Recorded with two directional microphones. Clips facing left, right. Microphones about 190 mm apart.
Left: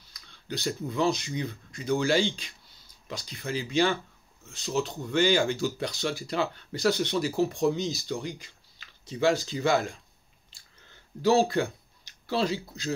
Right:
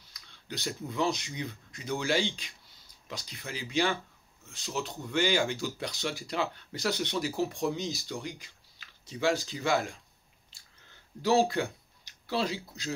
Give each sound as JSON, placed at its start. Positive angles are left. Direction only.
{"t": 0.1, "sound": "speech", "side_deg": -15}
{"t": 11.2, "sound": "speech", "side_deg": -15}